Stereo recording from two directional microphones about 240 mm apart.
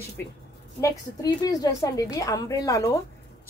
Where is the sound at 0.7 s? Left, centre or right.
Centre.